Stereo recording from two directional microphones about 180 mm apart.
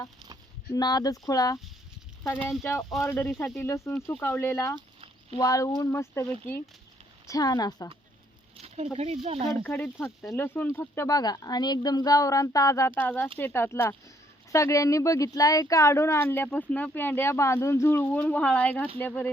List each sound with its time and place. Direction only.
0.7 s speech: 20° left (ahead or behind)
3.0 s speech: 15° left (ahead or behind)
7.3 s speech: 20° left (ahead or behind)
8.6 s speech: 35° right (ahead or behind)
9.6 s speech: 10° left (ahead or behind)